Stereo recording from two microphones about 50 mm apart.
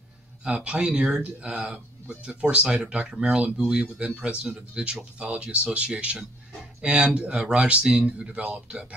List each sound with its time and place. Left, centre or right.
0.4 s speech: centre
1.2 s speech: right
1.7 s speech: centre